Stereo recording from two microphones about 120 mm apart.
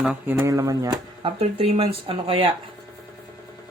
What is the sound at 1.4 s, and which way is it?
Speech, 55° right (ahead or behind).